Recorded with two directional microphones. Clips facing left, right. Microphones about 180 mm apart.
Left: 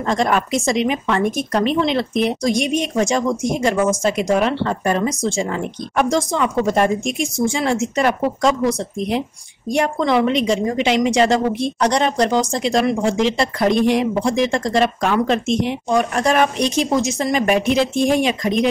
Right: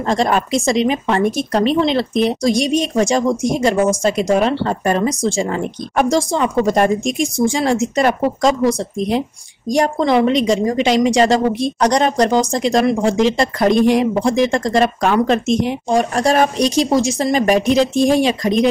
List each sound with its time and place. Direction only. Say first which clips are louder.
0.1 s a woman's voice: right 2 dB; 35° right (ahead or behind)